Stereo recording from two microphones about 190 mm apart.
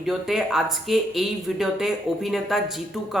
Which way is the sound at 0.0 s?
Centre (ahead or behind).